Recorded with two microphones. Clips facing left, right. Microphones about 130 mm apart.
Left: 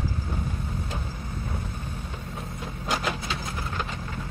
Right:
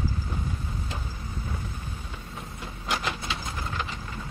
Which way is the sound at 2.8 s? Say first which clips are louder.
Left 2 dB; 45° left (ahead or behind).